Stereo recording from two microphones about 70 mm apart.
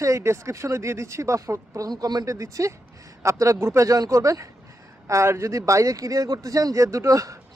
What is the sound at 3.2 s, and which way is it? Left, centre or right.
Speech, right.